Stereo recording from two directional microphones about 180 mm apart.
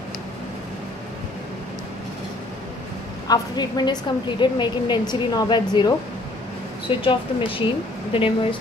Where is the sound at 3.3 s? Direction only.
25° left (ahead or behind).